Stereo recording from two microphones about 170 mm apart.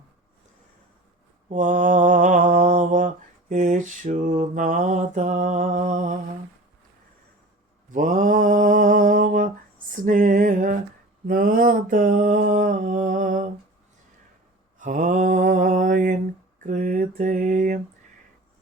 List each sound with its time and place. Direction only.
1.5 s mantra: 45° right (ahead or behind)
7.9 s mantra: 50° right (ahead or behind)
10.0 s a sound: 50° right (ahead or behind)
14.8 s mantra: 50° right (ahead or behind)